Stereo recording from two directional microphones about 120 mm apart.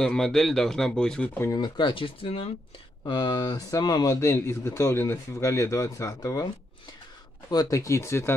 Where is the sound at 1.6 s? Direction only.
40° left (ahead or behind).